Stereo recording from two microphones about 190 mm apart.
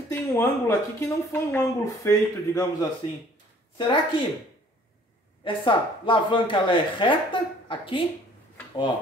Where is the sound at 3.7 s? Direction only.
25° left (ahead or behind).